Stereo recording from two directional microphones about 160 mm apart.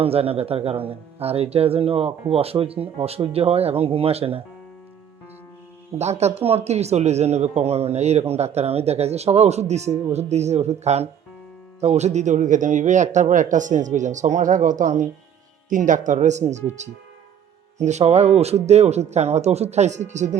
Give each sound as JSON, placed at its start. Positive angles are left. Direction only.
{"t": 0.0, "sound": "speech", "side_deg": -35}
{"t": 6.0, "sound": "speech", "side_deg": -45}